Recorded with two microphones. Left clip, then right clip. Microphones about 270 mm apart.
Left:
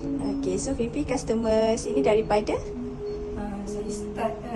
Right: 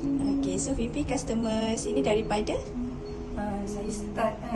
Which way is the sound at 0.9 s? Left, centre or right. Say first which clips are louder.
Left 3 dB; centre.